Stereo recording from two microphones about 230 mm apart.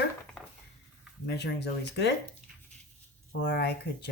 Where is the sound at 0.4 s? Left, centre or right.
Centre.